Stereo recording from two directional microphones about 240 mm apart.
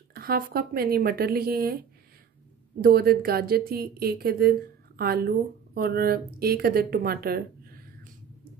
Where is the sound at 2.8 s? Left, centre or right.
Right.